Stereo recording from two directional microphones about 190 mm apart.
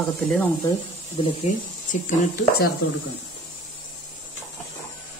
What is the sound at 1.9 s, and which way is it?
Speech, 50° left (ahead or behind).